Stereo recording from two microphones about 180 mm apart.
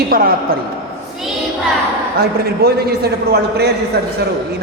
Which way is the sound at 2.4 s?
60° right (ahead or behind).